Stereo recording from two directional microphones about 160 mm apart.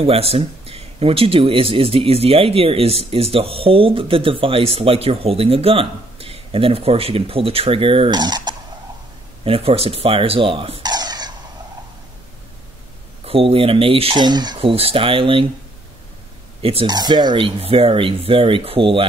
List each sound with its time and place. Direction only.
0.0 s speech: 40° right (ahead or behind)
9.4 s speech: 35° right (ahead or behind)
13.2 s speech: 35° right (ahead or behind)
16.6 s speech: 30° right (ahead or behind)